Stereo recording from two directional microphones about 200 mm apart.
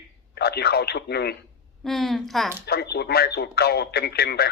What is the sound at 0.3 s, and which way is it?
Speech, 55° left (ahead or behind).